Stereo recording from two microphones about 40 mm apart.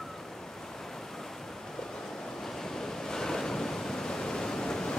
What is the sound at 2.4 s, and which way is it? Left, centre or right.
Waves, centre.